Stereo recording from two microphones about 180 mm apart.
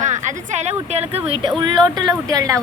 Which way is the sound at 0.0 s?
40° right (ahead or behind).